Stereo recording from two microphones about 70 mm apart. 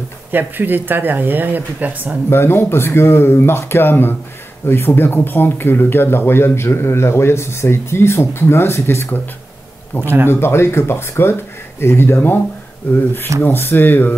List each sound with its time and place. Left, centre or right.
0.3 s speech: right
2.2 s speech: left
9.9 s speech: left
10.3 s speech: left